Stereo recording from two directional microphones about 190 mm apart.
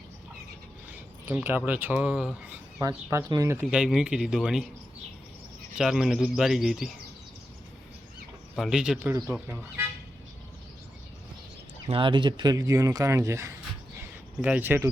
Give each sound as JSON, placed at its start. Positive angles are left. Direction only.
{"t": 0.9, "sound": "speech", "side_deg": -10}
{"t": 5.7, "sound": "speech", "side_deg": -5}
{"t": 8.5, "sound": "speech", "side_deg": 0}
{"t": 11.9, "sound": "speech", "side_deg": -25}